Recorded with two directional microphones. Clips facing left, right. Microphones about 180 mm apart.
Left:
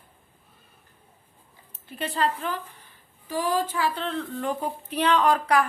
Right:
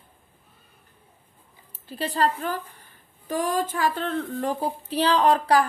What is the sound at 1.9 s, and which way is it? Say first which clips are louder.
Speech: right 2 dB; 35° right (ahead or behind).